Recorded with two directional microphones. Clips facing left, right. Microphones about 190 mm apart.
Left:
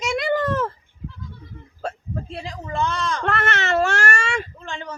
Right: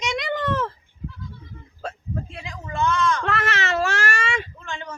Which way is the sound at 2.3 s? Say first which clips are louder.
Left 7 dB; 35° left (ahead or behind).